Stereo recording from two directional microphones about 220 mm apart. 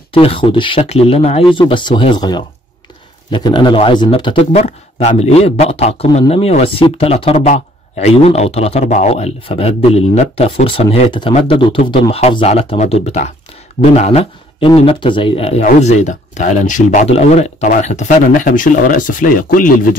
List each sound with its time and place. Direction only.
0.1 s a man's voice: 25° left (ahead or behind)